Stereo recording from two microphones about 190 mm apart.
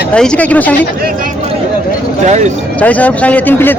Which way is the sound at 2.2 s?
40° right (ahead or behind).